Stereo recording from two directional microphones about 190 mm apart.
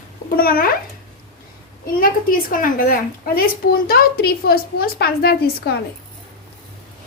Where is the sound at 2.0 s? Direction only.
50° left (ahead or behind).